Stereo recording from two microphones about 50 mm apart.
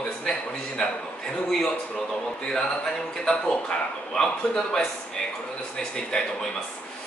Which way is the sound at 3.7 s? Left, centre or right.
Centre.